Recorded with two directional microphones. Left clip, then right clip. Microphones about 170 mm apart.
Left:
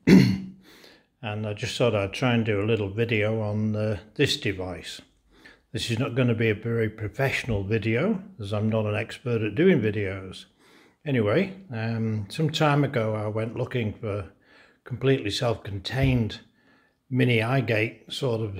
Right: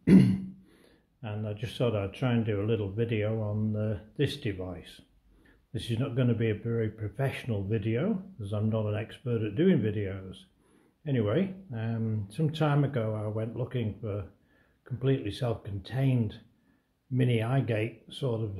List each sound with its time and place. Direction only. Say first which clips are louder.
0.0 s speech: left 5 dB; 35° left (ahead or behind)